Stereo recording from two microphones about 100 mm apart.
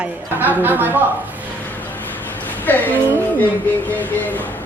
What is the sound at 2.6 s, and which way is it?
Speech, 20° left (ahead or behind).